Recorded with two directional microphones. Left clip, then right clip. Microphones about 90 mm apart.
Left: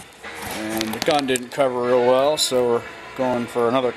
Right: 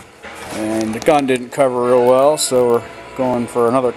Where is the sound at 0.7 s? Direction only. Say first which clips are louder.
Right 6 dB; 20° left (ahead or behind).